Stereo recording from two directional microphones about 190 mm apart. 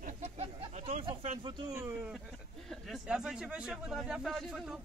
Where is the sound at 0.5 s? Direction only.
35° right (ahead or behind).